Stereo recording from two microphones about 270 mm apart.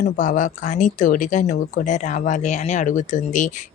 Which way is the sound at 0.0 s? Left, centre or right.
Left.